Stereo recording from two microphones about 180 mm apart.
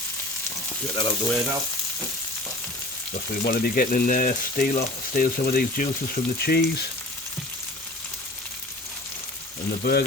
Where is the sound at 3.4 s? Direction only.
55° left (ahead or behind).